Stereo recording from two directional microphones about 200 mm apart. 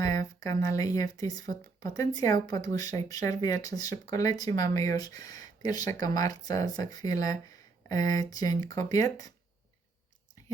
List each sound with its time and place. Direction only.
0.0 s speech: 15° left (ahead or behind)